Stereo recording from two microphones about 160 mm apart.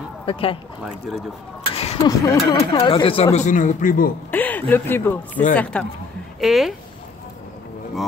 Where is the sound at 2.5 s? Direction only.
25° left (ahead or behind).